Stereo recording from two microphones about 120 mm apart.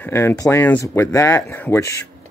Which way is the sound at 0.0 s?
20° left (ahead or behind).